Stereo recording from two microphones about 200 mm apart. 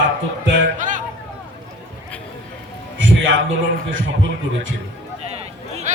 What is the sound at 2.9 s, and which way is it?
Music, 70° right (ahead or behind).